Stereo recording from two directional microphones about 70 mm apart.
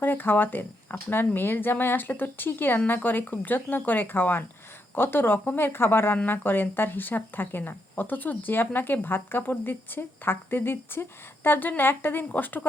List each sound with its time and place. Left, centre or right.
0.0 s speech: left